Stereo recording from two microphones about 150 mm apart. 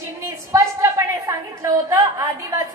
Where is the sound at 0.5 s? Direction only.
20° right (ahead or behind).